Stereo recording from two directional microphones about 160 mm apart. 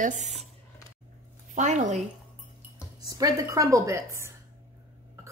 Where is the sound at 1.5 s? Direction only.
50° right (ahead or behind).